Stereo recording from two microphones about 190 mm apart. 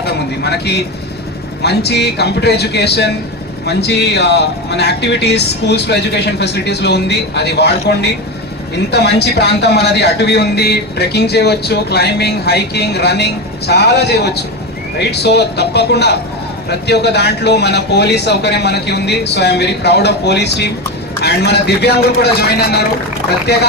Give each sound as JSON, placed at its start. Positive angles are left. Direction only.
{"t": 0.0, "sound": "a man's voice", "side_deg": 60}